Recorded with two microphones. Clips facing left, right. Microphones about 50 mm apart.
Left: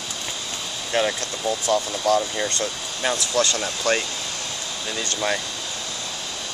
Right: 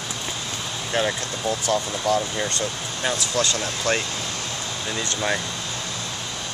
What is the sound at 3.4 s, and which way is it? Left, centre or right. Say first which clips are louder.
Speech: left 3 dB; right.